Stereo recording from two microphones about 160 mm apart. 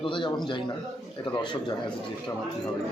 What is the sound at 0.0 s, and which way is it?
Speech, 30° left (ahead or behind).